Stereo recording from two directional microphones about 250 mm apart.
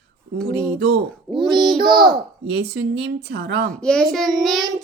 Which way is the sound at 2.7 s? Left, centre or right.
Right.